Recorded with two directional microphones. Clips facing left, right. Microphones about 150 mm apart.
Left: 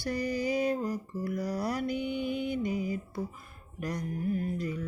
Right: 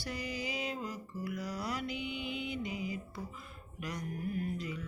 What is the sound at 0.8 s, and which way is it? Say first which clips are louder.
Mantra: left 7 dB; 40° left (ahead or behind).